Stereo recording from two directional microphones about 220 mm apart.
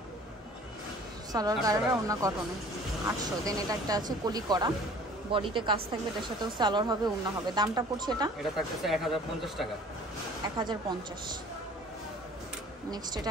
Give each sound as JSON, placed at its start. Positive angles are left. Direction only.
{"t": 1.3, "sound": "speech", "side_deg": -15}
{"t": 8.4, "sound": "speech", "side_deg": 0}
{"t": 10.6, "sound": "speech", "side_deg": -20}
{"t": 12.9, "sound": "speech", "side_deg": -20}